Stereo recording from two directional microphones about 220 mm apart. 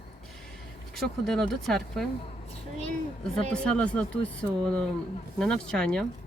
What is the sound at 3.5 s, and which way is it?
Speech, 5° left (ahead or behind).